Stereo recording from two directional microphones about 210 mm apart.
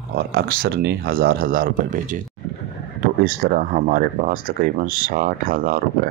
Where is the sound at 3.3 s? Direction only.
45° right (ahead or behind).